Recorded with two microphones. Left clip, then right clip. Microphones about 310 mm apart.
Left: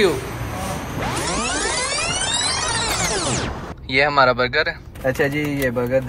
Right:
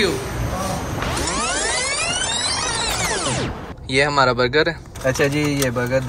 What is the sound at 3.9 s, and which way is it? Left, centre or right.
Speech, centre.